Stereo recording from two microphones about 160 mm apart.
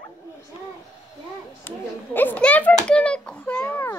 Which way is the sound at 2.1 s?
10° left (ahead or behind).